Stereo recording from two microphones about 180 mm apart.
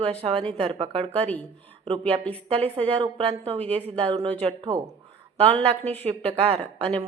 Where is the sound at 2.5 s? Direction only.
35° right (ahead or behind).